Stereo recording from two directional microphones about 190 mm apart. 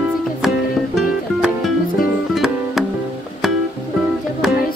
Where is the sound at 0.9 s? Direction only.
Centre (ahead or behind).